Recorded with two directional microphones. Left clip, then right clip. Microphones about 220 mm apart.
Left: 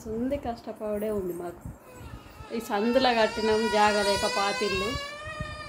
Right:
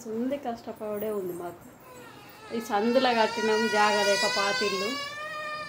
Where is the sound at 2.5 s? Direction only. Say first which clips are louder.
Right 1 dB; 10° left (ahead or behind).